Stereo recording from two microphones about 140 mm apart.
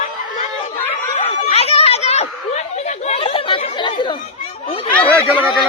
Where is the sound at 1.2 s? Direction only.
50° left (ahead or behind).